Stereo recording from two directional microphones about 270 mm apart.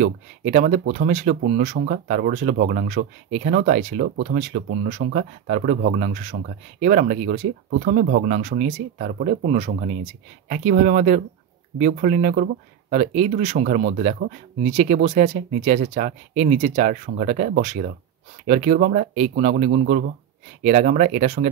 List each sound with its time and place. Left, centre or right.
0.0 s speech: right